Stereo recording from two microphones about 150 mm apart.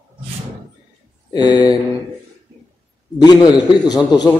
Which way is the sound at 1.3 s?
30° left (ahead or behind).